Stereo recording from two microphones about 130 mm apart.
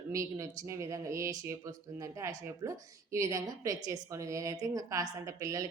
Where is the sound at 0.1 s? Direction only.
25° right (ahead or behind).